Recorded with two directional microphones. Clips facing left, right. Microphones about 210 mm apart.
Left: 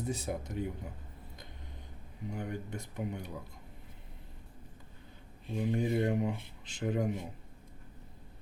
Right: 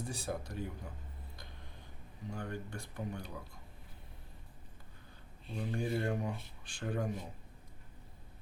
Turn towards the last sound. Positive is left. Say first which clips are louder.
# left 5 dB
turn(degrees=20)  # may be behind; listen again after turning